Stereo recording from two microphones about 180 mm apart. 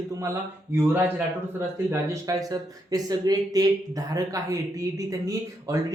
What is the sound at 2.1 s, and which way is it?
Speech, 20° right (ahead or behind).